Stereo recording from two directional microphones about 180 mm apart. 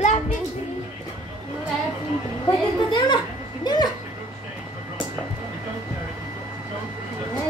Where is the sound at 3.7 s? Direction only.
25° left (ahead or behind).